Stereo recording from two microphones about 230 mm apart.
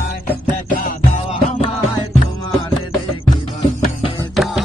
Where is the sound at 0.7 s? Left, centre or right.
Left.